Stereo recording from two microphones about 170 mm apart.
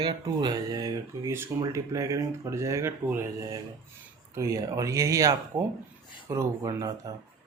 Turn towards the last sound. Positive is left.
turn(degrees=-20)  # may be behind; listen again after turning